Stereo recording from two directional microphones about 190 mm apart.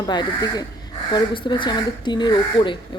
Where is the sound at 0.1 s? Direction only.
20° left (ahead or behind).